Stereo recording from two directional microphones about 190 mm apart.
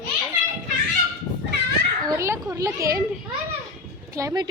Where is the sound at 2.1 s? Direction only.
15° right (ahead or behind).